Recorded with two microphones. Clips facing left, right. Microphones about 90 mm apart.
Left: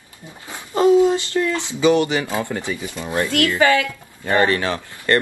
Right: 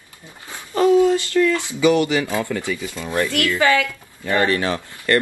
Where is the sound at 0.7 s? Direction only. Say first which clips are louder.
Left 1 dB; 20° left (ahead or behind).